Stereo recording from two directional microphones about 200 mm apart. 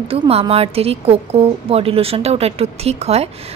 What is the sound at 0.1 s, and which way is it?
A woman's voice, 30° right (ahead or behind).